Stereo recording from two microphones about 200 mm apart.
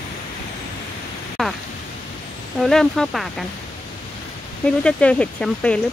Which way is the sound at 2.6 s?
Centre (ahead or behind).